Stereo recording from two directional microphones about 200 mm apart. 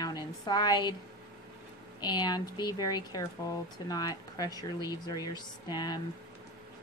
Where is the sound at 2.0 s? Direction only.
20° left (ahead or behind).